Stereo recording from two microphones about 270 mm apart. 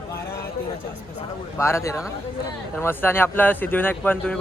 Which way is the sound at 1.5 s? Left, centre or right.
Centre.